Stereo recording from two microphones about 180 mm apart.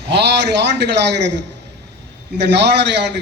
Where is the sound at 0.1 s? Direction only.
70° right (ahead or behind).